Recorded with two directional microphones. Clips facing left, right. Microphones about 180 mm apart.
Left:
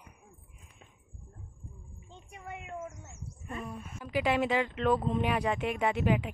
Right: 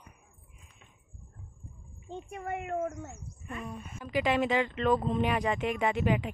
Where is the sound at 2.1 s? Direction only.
50° right (ahead or behind).